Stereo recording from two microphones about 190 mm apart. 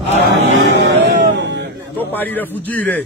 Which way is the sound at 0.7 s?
65° right (ahead or behind).